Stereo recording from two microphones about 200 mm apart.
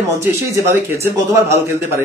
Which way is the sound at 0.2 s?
15° right (ahead or behind).